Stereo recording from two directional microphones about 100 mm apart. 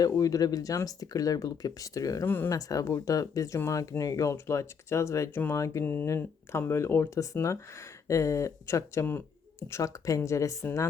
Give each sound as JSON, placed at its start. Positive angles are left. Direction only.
{"t": 0.0, "sound": "speech", "side_deg": 35}
{"t": 2.2, "sound": "speech", "side_deg": 20}
{"t": 2.6, "sound": "speech", "side_deg": 35}
{"t": 5.8, "sound": "speech", "side_deg": 20}